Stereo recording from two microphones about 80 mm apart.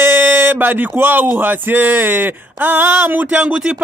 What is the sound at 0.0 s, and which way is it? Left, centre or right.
Speech, right.